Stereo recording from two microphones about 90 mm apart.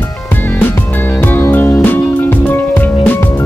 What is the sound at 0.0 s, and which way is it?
Music, 20° left (ahead or behind).